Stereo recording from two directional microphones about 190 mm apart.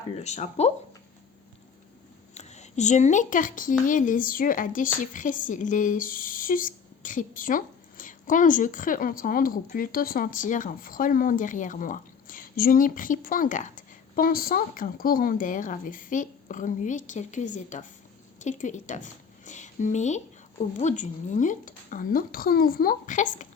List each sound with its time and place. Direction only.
0.2 s a woman's voice: 35° left (ahead or behind)
2.3 s a woman's voice: 35° left (ahead or behind)